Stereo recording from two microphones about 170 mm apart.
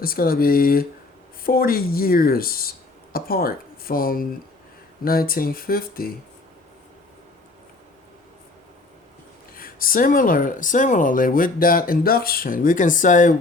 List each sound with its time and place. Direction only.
0.0 s speech: 60° left (ahead or behind)
9.6 s speech: 55° left (ahead or behind)